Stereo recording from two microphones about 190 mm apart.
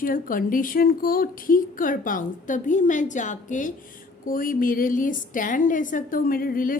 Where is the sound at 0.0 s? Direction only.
45° left (ahead or behind).